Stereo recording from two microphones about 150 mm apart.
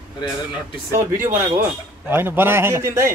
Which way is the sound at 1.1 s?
15° right (ahead or behind).